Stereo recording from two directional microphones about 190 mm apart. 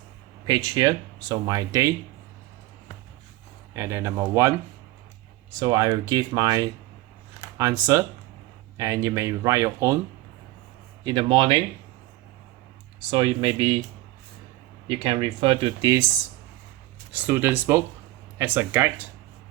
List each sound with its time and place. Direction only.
0.4 s speech: 20° right (ahead or behind)
3.8 s speech: 15° right (ahead or behind)
5.5 s speech: 20° right (ahead or behind)
11.0 s speech: 25° right (ahead or behind)
13.1 s speech: 25° right (ahead or behind)
14.8 s speech: 30° right (ahead or behind)
17.1 s speech: 10° right (ahead or behind)